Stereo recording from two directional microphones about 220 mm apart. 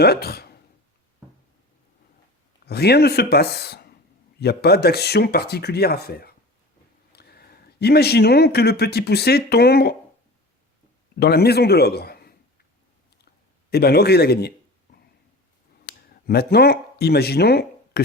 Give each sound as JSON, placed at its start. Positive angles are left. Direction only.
{"t": 0.0, "sound": "speech", "side_deg": 45}
{"t": 2.6, "sound": "speech", "side_deg": 45}
{"t": 11.2, "sound": "speech", "side_deg": 45}
{"t": 13.7, "sound": "speech", "side_deg": 45}
{"t": 15.9, "sound": "speech", "side_deg": 45}